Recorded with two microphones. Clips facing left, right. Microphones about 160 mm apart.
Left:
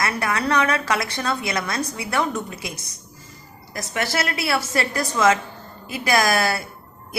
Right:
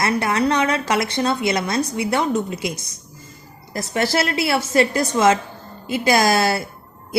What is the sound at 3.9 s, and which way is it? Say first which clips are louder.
Speech: right 5 dB; 30° right (ahead or behind).